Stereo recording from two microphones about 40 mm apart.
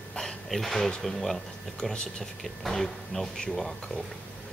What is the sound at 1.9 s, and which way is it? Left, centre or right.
Speech, left.